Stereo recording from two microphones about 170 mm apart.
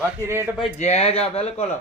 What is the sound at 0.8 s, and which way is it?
Speech, 40° left (ahead or behind).